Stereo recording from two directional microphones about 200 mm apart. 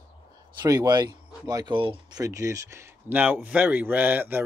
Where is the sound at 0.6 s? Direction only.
20° right (ahead or behind).